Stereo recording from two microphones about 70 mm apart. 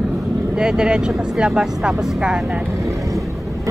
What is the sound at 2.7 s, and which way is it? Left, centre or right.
Vehicle, right.